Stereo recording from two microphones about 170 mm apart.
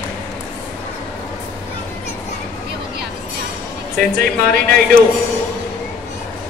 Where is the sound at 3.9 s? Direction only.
55° right (ahead or behind).